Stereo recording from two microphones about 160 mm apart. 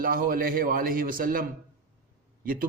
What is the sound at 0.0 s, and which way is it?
Speech, 65° right (ahead or behind).